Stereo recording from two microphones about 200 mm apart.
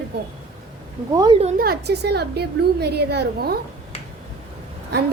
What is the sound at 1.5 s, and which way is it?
A woman's voice, 50° right (ahead or behind).